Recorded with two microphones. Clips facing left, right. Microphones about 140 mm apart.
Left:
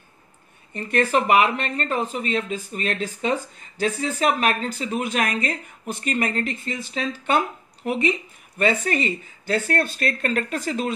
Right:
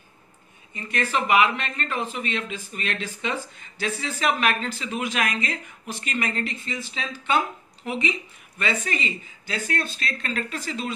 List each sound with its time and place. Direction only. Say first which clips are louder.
0.7 s speech: left 6 dB; 45° left (ahead or behind)